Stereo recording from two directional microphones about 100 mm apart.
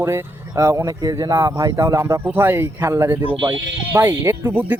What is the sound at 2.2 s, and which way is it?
Speech, 20° right (ahead or behind).